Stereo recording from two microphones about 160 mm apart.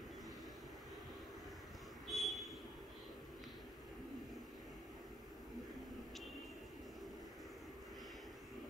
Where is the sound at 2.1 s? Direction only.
Centre (ahead or behind).